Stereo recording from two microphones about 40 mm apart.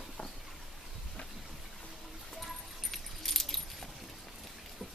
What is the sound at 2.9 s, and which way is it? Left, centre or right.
Keys jangling, centre.